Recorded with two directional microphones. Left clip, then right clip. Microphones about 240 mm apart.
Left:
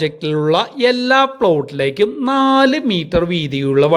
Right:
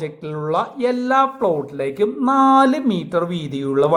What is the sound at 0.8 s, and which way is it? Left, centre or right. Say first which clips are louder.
Speech: left 3 dB; left.